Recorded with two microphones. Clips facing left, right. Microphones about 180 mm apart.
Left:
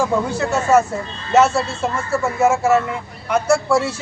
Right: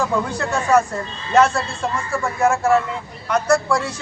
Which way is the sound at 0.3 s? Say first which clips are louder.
Left 2 dB; 5° left (ahead or behind).